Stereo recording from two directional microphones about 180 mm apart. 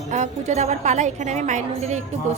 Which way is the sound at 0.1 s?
40° right (ahead or behind).